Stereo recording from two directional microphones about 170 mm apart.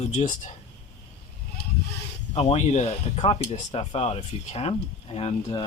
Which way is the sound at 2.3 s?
40° left (ahead or behind).